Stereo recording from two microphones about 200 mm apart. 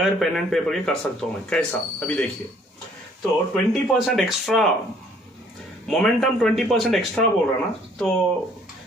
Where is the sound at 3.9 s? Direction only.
Centre (ahead or behind).